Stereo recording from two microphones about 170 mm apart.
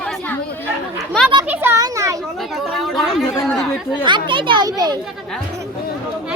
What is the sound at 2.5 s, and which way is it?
Speech, centre (ahead or behind).